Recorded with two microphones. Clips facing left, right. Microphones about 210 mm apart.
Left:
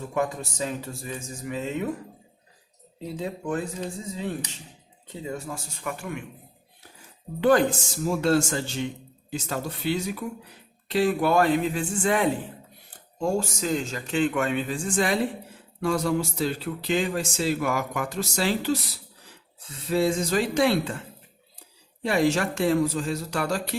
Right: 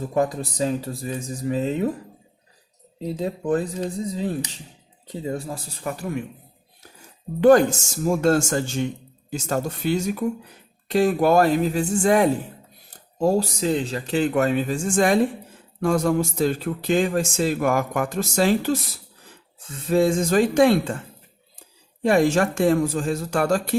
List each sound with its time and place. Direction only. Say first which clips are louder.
0.1 s speech: right 4 dB; 35° right (ahead or behind)
3.0 s speech: right 5 dB; 35° right (ahead or behind)
7.4 s speech: right 6 dB; 45° right (ahead or behind)
22.0 s speech: right 5 dB; 50° right (ahead or behind)